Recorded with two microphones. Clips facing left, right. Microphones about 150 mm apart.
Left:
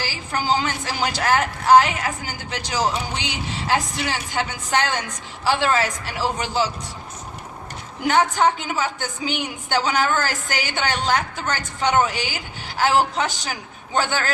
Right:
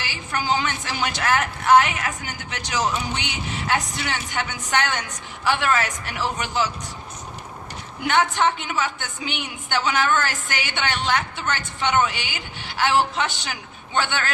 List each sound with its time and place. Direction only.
0.0 s a woman's voice: 35° left (ahead or behind)
8.0 s a woman's voice: 35° left (ahead or behind)